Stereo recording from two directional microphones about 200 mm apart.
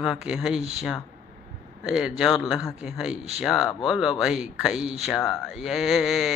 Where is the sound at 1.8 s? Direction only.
Centre (ahead or behind).